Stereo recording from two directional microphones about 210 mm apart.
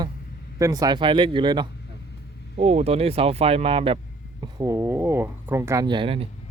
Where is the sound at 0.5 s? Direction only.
15° right (ahead or behind).